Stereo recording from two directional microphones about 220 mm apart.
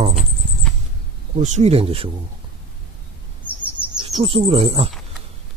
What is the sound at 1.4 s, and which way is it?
Speech, 30° right (ahead or behind).